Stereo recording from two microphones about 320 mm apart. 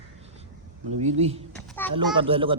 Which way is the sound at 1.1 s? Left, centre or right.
Centre.